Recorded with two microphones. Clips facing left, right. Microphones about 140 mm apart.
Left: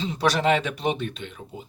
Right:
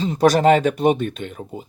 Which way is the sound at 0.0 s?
45° right (ahead or behind).